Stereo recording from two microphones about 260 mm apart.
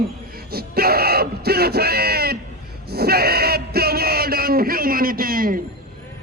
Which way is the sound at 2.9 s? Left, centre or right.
Right.